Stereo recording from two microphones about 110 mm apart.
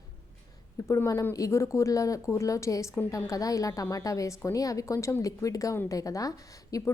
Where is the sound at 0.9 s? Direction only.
25° left (ahead or behind).